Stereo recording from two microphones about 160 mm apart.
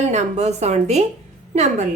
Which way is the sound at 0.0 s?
45° right (ahead or behind).